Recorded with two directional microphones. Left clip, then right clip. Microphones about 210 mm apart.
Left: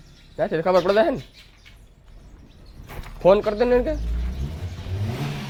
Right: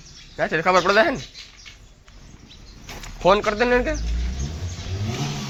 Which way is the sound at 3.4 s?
20° left (ahead or behind).